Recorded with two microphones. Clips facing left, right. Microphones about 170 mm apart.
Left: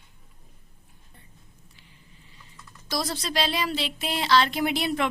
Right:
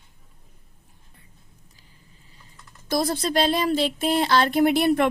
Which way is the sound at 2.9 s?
55° right (ahead or behind).